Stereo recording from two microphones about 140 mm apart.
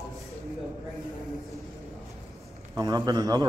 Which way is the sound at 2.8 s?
25° right (ahead or behind).